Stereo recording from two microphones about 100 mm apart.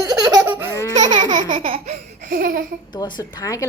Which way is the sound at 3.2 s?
35° left (ahead or behind).